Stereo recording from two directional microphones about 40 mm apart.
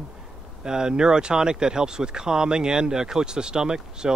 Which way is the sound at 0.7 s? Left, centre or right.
Centre.